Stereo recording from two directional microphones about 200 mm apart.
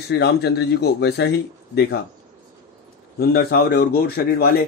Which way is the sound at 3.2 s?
50° left (ahead or behind).